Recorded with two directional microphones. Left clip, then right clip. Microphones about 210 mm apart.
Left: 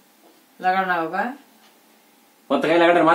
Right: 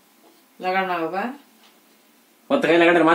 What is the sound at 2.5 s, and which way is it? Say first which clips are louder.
Speech: even; 30° right (ahead or behind).